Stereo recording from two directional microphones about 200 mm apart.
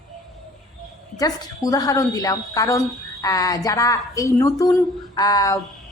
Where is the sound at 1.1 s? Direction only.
20° left (ahead or behind).